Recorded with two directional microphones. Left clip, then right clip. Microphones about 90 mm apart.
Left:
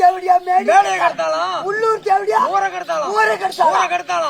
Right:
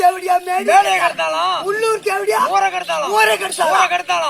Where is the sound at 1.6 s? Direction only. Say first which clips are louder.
Even; 20° right (ahead or behind).